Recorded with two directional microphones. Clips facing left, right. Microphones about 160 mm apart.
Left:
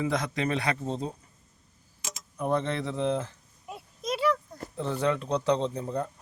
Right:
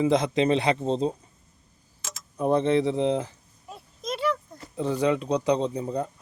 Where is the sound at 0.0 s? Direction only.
25° right (ahead or behind).